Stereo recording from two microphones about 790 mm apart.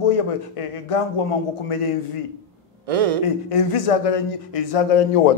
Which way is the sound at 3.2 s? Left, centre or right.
Left.